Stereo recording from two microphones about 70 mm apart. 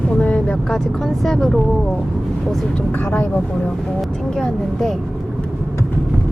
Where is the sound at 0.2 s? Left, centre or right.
Centre.